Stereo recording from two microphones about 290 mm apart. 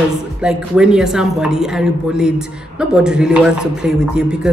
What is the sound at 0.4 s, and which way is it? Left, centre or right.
A woman's voice, centre.